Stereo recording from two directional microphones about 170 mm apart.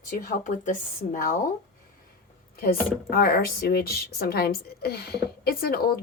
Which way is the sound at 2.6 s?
60° left (ahead or behind).